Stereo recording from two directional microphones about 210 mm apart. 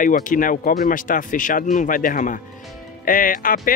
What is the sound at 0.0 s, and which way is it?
Speech, 40° left (ahead or behind).